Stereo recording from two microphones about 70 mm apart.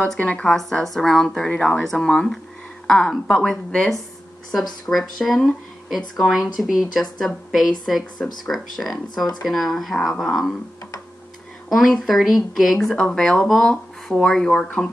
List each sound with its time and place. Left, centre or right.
0.2 s speech: centre
0.6 s speech: centre
4.9 s speech: centre
11.7 s speech: centre